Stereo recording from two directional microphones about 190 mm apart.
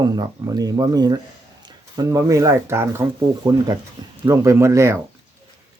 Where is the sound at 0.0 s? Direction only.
20° right (ahead or behind).